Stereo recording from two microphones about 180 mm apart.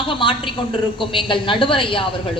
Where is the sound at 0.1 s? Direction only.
25° left (ahead or behind).